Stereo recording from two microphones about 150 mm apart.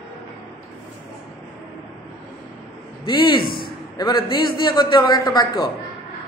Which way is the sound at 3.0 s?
30° left (ahead or behind).